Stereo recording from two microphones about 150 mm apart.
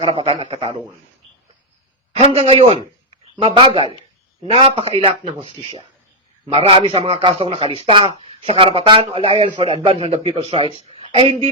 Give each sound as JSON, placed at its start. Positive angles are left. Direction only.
{"t": 0.0, "sound": "a man's voice", "side_deg": -35}
{"t": 2.1, "sound": "a man's voice", "side_deg": -40}